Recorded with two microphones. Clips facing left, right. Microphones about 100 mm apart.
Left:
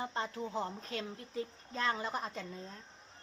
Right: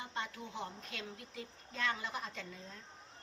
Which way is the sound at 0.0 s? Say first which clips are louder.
Left 5 dB; 35° left (ahead or behind).